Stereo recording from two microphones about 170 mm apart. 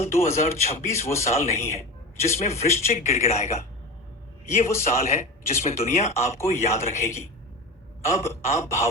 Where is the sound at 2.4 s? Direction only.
40° left (ahead or behind).